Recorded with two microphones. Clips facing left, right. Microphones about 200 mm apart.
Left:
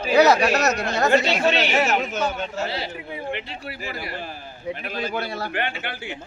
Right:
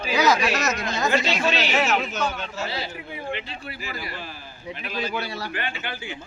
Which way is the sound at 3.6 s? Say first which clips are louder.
Left 2 dB; 50° left (ahead or behind).